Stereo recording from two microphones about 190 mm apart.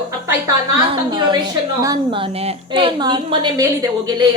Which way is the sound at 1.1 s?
25° right (ahead or behind).